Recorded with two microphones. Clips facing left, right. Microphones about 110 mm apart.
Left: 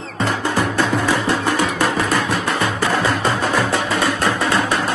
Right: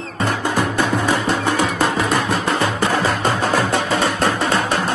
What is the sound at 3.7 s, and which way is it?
Music, 25° right (ahead or behind).